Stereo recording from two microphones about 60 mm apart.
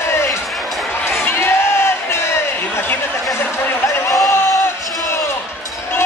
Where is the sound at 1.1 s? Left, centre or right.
Left.